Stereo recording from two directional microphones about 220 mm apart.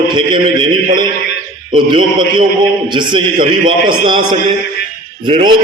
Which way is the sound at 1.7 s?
20° right (ahead or behind).